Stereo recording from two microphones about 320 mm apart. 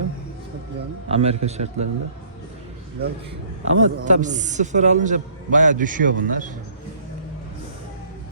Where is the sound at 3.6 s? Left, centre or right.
Right.